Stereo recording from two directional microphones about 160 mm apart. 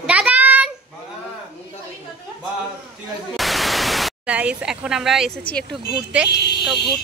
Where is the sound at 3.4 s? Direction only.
Centre (ahead or behind).